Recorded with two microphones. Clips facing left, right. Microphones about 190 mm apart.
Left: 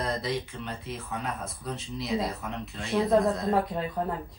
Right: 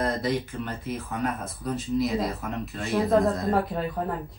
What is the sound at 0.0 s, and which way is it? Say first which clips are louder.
Speech: right 4 dB; centre (ahead or behind).